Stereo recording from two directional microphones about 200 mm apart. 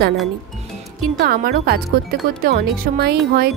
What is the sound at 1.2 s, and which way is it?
A woman's voice, 50° right (ahead or behind).